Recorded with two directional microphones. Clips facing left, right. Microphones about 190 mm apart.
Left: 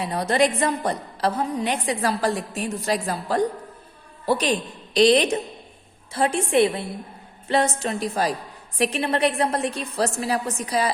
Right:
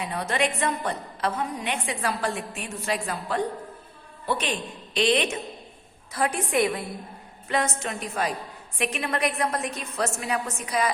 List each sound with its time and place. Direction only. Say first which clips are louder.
0.0 s a woman's voice: left 6 dB; 35° left (ahead or behind)